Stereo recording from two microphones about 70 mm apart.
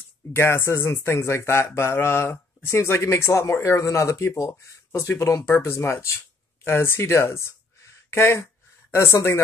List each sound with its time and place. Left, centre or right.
0.3 s speech: left